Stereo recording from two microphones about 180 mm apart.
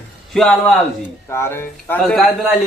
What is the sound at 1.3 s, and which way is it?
Speech, 15° left (ahead or behind).